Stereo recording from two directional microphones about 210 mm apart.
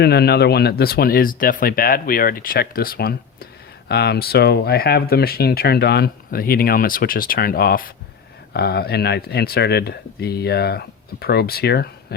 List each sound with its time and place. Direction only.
0.0 s speech: 50° left (ahead or behind)